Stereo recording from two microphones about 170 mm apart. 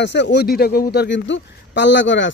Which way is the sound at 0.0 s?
90° left.